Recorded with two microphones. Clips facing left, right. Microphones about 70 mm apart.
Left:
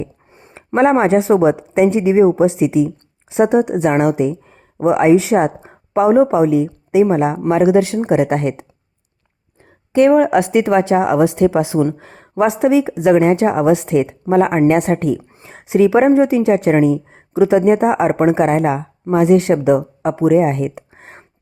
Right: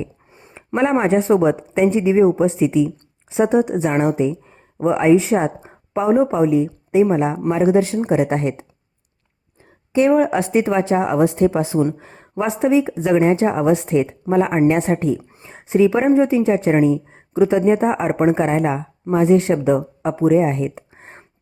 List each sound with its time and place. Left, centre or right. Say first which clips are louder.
0.5 s speech: left 5 dB; left
7.9 s speech: left 3 dB; left
9.9 s speech: left 4 dB; left
11.9 s speech: left 7 dB; left
14.7 s speech: left 3 dB; left
16.8 s speech: left 2 dB; left
20.9 s a sound: left 2 dB; left